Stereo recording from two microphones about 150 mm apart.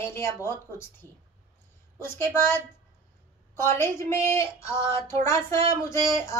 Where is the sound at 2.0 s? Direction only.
15° left (ahead or behind).